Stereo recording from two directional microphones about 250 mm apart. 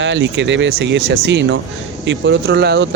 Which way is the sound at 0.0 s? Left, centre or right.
Right.